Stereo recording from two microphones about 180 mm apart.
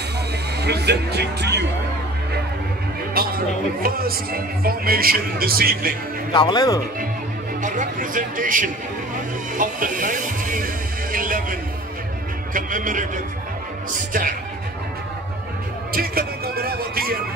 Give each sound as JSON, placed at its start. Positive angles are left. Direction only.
{"t": 0.6, "sound": "speech", "side_deg": -65}
{"t": 3.2, "sound": "speech", "side_deg": -55}
{"t": 6.3, "sound": "a man's voice", "side_deg": 25}
{"t": 7.6, "sound": "speech", "side_deg": -45}
{"t": 12.5, "sound": "a man's voice", "side_deg": -50}
{"t": 15.9, "sound": "music", "side_deg": -55}